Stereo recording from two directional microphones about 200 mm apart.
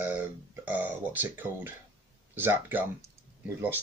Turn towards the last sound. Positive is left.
turn(degrees=-10)  # may be behind; listen again after turning